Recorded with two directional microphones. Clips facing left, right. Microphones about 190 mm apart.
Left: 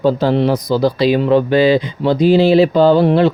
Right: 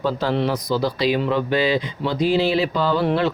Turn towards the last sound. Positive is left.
turn(degrees=25)  # may be behind; listen again after turning